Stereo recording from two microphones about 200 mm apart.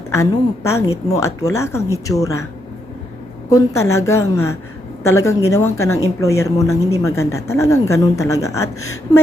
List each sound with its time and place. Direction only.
0.1 s a woman's voice: 15° left (ahead or behind)
3.5 s a woman's voice: 15° left (ahead or behind)